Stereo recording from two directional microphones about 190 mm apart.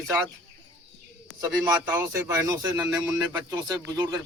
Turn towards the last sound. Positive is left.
turn(degrees=-20)  # may be behind; listen again after turning